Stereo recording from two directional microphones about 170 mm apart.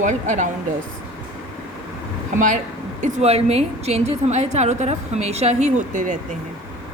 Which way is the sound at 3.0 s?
40° right (ahead or behind).